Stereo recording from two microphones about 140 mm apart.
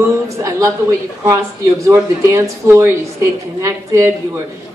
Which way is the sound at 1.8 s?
20° right (ahead or behind).